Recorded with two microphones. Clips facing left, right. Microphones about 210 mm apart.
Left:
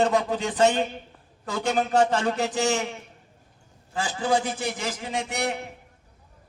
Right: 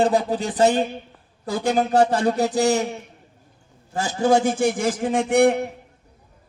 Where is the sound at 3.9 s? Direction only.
45° right (ahead or behind).